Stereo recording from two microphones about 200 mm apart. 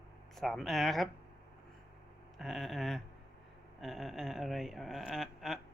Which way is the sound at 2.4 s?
Centre (ahead or behind).